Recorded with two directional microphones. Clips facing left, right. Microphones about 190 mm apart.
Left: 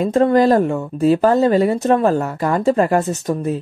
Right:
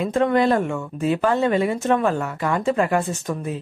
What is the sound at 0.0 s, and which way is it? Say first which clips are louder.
Speech: left 5 dB; 35° left (ahead or behind).